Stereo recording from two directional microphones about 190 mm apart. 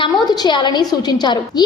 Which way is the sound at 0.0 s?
20° left (ahead or behind).